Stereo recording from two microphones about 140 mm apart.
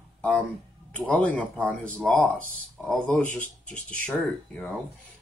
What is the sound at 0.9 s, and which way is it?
Speech, 10° left (ahead or behind).